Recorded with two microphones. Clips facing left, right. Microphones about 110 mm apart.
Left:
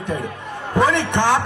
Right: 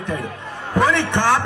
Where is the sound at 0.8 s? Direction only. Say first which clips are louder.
Even; 20° left (ahead or behind).